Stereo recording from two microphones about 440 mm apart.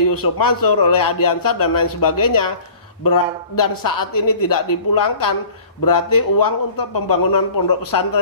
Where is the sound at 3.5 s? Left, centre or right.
Left.